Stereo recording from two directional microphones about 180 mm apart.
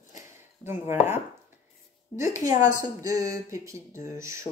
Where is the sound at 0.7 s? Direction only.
10° right (ahead or behind).